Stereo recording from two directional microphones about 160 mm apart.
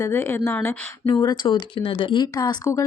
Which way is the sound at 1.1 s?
30° left (ahead or behind).